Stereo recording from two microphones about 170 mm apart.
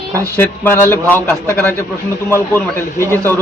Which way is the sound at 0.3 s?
10° left (ahead or behind).